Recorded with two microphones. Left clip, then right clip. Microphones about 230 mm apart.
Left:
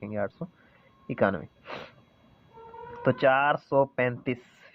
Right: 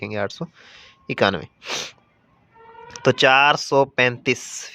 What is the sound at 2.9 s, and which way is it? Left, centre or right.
Speech, right.